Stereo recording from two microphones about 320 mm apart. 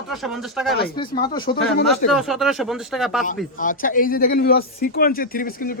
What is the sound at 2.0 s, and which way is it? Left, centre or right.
A man's voice, centre.